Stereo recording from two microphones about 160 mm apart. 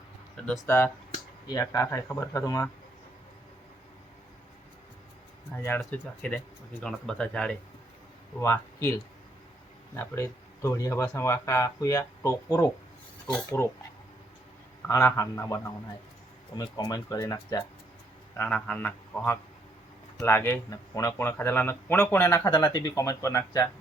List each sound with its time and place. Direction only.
0.3 s speech: 5° left (ahead or behind)
1.5 s speech: 20° left (ahead or behind)
5.8 s speech: 10° left (ahead or behind)
8.4 s speech: 15° left (ahead or behind)
9.9 s speech: 15° left (ahead or behind)
14.8 s speech: 20° left (ahead or behind)
18.3 s speech: 10° left (ahead or behind)